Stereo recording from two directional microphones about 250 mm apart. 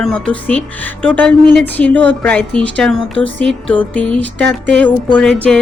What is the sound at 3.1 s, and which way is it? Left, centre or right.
Music, right.